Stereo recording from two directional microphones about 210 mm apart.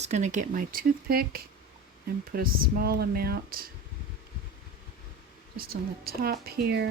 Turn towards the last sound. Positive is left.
turn(degrees=-50)  # may be behind; listen again after turning